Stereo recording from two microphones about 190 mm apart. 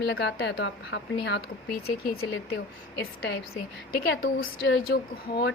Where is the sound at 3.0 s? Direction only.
60° left (ahead or behind).